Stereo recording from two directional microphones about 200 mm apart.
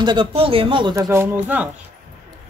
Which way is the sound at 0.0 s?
25° right (ahead or behind).